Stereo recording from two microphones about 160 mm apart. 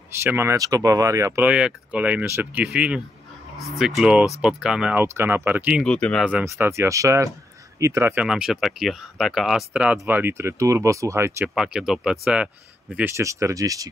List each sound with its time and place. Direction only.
0.2 s speech: 15° right (ahead or behind)
1.5 s speech: 5° right (ahead or behind)
5.9 s speech: 5° left (ahead or behind)
6.4 s speech: 15° right (ahead or behind)
11.5 s speech: 5° right (ahead or behind)
12.9 s speech: 15° right (ahead or behind)